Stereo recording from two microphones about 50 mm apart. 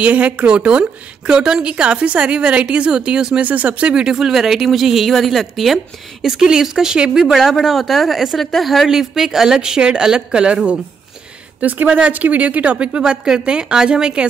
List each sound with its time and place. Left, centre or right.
0.0 s a woman's voice: right
3.4 s speech: right
11.6 s a woman's voice: right; by 14.2 s centre